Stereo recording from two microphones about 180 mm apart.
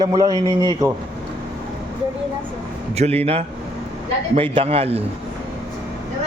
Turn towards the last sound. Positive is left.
turn(degrees=-35)  # may be behind; listen again after turning